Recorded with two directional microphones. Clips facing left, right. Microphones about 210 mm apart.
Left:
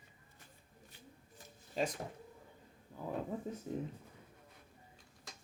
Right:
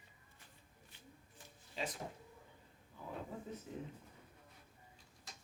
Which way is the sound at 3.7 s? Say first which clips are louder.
Left 9 dB; 40° left (ahead or behind).